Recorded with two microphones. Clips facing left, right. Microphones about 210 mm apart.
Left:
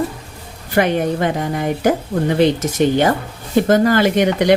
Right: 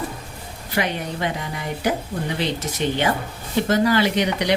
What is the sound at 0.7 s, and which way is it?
Speech, 50° left (ahead or behind).